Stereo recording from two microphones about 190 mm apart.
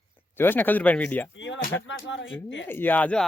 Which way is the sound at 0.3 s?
10° left (ahead or behind).